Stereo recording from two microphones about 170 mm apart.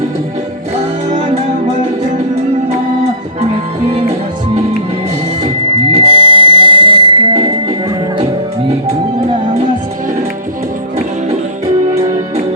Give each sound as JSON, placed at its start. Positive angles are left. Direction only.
{"t": 1.1, "sound": "music", "side_deg": -40}
{"t": 3.8, "sound": "music", "side_deg": -35}
{"t": 5.9, "sound": "music", "side_deg": -35}